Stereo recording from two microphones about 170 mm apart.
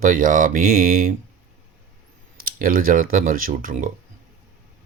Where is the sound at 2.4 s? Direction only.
55° right (ahead or behind).